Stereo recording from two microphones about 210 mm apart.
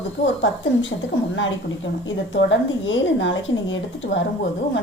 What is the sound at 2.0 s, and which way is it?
A woman's voice, 65° left (ahead or behind).